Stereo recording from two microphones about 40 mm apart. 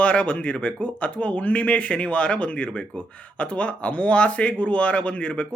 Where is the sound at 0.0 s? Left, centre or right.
Left.